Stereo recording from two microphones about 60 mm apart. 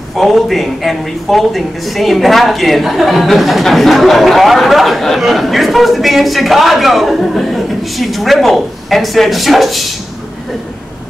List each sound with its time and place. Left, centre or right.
0.1 s speech: centre